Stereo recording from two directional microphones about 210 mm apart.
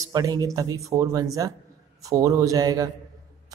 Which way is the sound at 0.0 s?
15° right (ahead or behind).